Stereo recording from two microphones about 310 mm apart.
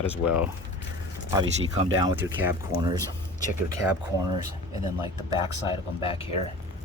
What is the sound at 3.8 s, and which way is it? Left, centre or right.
Speech, centre.